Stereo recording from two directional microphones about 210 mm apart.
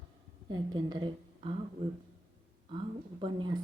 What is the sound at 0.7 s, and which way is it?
Speech, 20° right (ahead or behind).